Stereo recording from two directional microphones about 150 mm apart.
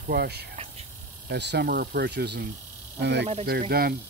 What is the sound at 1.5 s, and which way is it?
Speech, 85° right.